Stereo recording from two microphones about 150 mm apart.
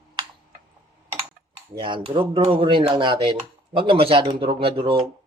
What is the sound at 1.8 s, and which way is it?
Speech, 35° right (ahead or behind).